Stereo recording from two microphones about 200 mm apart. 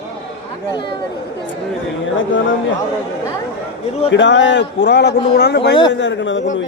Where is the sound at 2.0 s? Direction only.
70° left (ahead or behind).